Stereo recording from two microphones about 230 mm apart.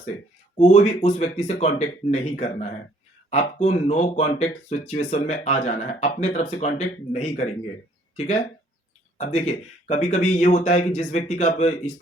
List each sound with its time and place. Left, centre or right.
0.6 s speech: left